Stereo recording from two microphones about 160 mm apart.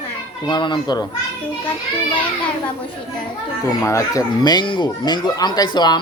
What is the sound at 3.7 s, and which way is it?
Speech, 20° left (ahead or behind).